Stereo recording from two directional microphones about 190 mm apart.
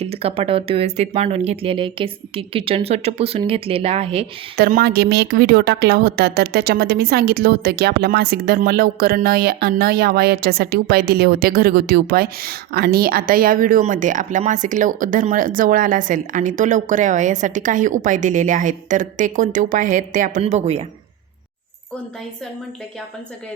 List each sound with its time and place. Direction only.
0.0 s speech: 30° right (ahead or behind)
4.5 s a woman's voice: 55° right (ahead or behind); by 20.8 s 35° right (ahead or behind)